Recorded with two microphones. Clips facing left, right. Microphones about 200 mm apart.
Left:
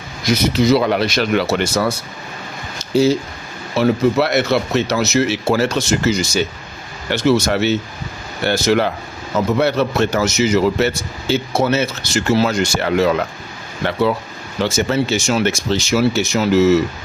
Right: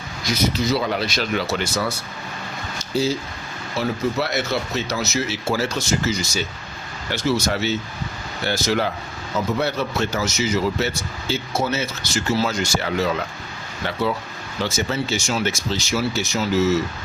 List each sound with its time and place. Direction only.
0.3 s a man's voice: 70° left (ahead or behind)
2.9 s a man's voice: 75° left (ahead or behind)
14.6 s a man's voice: 60° left (ahead or behind)